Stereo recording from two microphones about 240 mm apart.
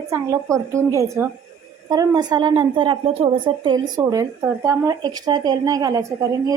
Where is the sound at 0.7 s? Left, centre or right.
Centre.